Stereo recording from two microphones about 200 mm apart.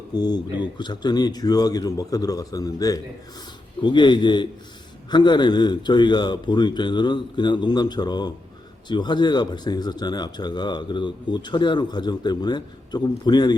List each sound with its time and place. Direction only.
0.2 s speech: 20° left (ahead or behind)